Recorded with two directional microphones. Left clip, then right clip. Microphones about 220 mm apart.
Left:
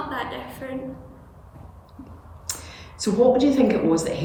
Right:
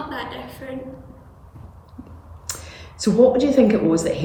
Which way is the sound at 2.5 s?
30° right (ahead or behind).